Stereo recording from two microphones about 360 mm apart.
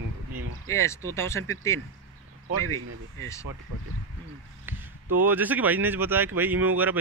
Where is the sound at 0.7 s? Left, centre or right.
Centre.